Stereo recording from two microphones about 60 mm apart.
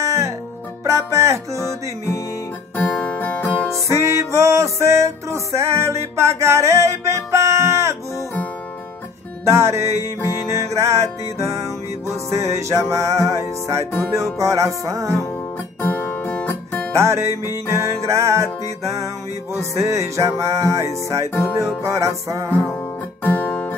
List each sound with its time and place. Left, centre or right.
0.0 s music: right
2.8 s guitar: centre
3.7 s music: right
9.4 s music: right
15.8 s guitar: left
16.9 s music: right
23.2 s music: left